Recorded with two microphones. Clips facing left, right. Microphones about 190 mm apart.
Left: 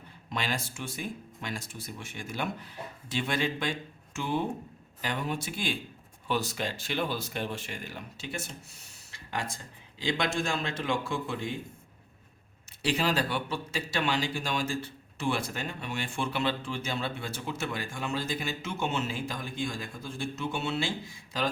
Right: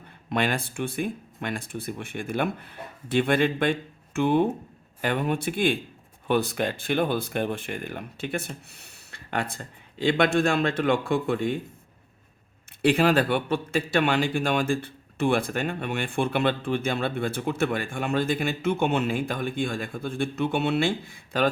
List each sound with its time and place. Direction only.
0.3 s speech: 55° right (ahead or behind)
12.8 s speech: 55° right (ahead or behind)